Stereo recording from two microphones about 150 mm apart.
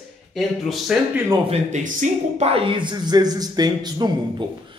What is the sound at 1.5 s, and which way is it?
Speech, 55° right (ahead or behind).